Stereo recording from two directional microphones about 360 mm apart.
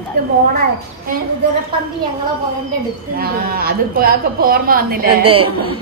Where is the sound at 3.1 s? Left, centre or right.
Right.